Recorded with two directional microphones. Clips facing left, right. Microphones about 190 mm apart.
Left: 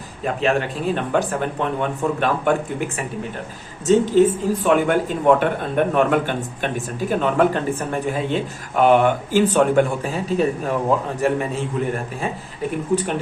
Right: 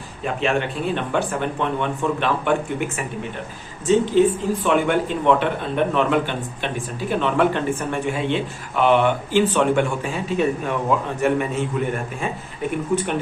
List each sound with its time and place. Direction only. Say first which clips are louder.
0.4 s speech: left 2 dB; 40° left (ahead or behind)
3.9 s a man's voice: left 1 dB; 45° left (ahead or behind)